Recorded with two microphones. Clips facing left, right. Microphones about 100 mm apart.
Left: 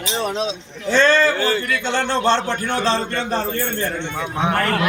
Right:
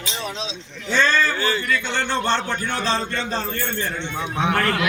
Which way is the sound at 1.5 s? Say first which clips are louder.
Left 2 dB; 65° left (ahead or behind).